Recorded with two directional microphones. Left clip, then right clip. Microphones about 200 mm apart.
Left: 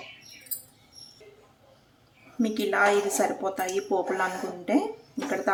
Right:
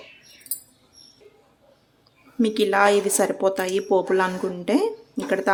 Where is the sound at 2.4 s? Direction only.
55° right (ahead or behind).